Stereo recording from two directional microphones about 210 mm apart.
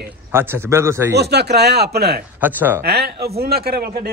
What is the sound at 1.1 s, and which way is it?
Speech, 50° right (ahead or behind).